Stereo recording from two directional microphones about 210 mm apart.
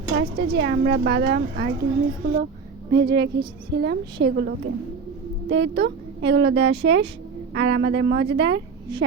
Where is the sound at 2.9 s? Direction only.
55° right (ahead or behind).